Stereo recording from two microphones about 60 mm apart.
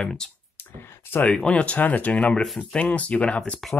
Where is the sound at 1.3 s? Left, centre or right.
Centre.